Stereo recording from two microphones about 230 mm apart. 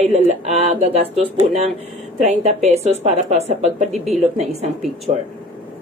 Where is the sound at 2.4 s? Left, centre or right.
Right.